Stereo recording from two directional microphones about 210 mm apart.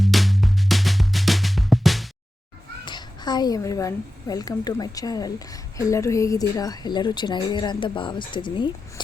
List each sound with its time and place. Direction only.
0.0 s music: centre (ahead or behind)
2.8 s a woman's voice: 20° left (ahead or behind)